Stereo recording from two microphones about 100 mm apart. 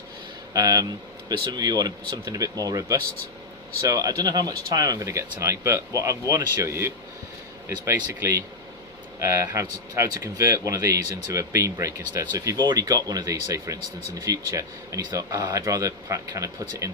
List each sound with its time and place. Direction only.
0.5 s speech: 35° right (ahead or behind)